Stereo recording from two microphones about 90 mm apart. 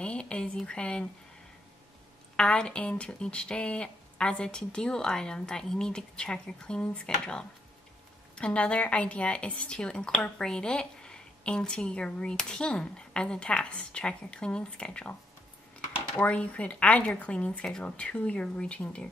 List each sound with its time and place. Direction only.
0.0 s a sound: 10° left (ahead or behind)
2.3 s speech: 10° left (ahead or behind)
16.2 s speech: 15° left (ahead or behind)